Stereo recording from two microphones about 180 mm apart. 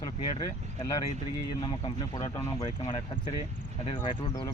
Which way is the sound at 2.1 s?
20° left (ahead or behind).